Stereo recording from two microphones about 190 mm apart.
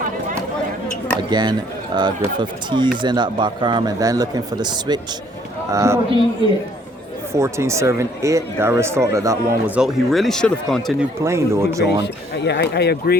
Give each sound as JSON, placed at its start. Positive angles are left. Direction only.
{"t": 1.3, "sound": "speech", "side_deg": -20}
{"t": 7.3, "sound": "speech", "side_deg": -15}
{"t": 11.2, "sound": "speech", "side_deg": -15}
{"t": 12.0, "sound": "speech", "side_deg": 65}